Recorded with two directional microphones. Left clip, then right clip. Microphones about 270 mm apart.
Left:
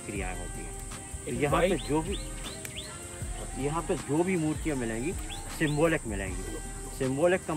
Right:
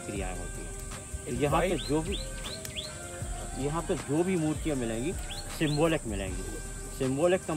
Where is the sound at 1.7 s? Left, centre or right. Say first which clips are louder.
Left 1 dB; centre.